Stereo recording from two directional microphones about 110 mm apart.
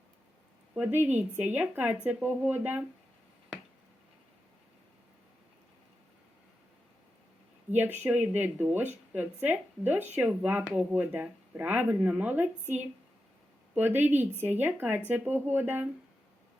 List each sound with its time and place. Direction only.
0.7 s speech: 15° right (ahead or behind)
7.8 s speech: 15° right (ahead or behind)